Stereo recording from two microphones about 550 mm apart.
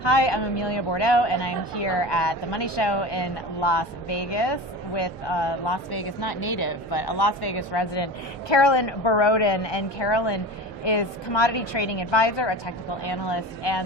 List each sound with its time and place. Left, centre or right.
0.0 s speech: left